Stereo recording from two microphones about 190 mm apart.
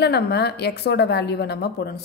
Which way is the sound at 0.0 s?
60° left (ahead or behind).